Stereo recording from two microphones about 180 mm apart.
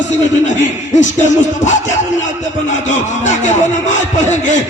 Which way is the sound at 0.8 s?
40° left (ahead or behind).